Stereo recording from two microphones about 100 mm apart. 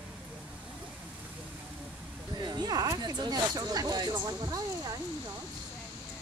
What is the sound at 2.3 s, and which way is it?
Speech, 45° right (ahead or behind).